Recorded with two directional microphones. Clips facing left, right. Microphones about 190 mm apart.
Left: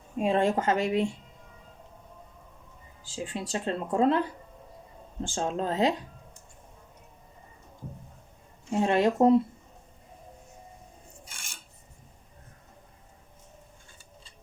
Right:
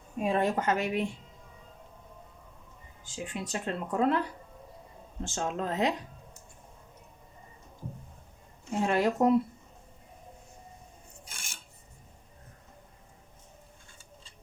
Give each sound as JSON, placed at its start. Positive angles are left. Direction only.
{"t": 0.2, "sound": "speech", "side_deg": 25}
{"t": 3.0, "sound": "speech", "side_deg": 30}
{"t": 5.2, "sound": "speech", "side_deg": 30}
{"t": 8.7, "sound": "speech", "side_deg": 25}